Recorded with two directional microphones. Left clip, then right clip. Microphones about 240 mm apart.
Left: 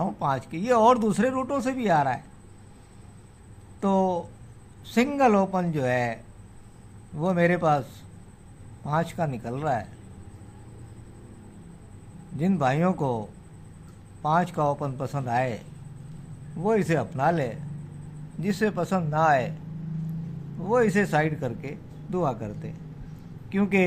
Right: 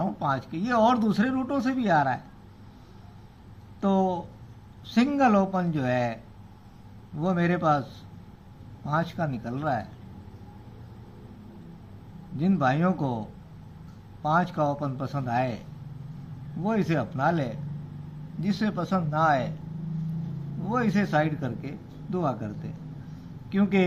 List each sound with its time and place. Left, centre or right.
0.0 s a man's voice: centre
3.8 s a man's voice: centre
7.2 s a man's voice: left
12.4 s a man's voice: left
16.6 s a man's voice: centre
20.7 s a man's voice: left